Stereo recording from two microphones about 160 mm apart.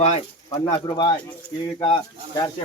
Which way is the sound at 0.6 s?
25° left (ahead or behind).